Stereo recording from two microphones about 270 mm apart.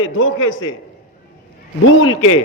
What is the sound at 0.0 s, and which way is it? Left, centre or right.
Speech, left.